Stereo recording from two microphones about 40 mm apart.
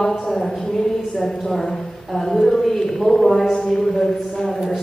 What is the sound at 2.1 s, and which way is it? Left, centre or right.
A woman's voice, centre.